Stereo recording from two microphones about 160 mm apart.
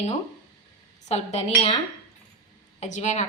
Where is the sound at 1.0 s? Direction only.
40° left (ahead or behind).